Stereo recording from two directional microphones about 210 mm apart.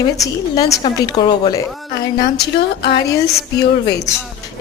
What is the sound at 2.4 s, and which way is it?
Speech, 50° left (ahead or behind).